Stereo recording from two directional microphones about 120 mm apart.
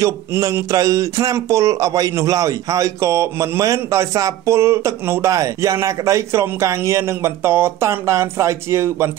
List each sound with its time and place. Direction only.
0.0 s speech: 30° right (ahead or behind)